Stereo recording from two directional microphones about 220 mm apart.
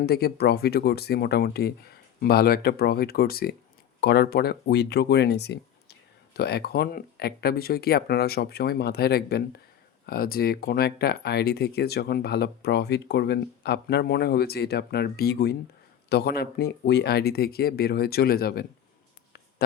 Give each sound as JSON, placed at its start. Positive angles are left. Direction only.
{"t": 0.0, "sound": "speech", "side_deg": 45}